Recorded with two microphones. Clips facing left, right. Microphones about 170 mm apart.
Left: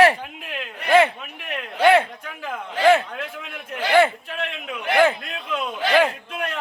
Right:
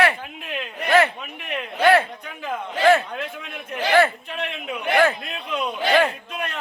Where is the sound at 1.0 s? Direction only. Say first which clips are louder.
Left 2 dB; 15° left (ahead or behind).